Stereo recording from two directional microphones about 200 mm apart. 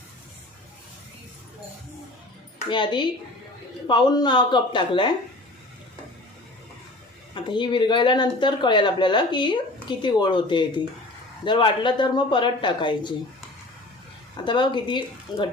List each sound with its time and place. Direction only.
2.6 s speech: 25° left (ahead or behind)
7.3 s speech: 25° left (ahead or behind)
14.4 s speech: 25° left (ahead or behind)